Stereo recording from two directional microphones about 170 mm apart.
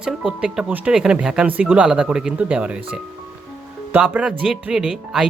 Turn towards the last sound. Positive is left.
turn(degrees=-5)  # may be behind; listen again after turning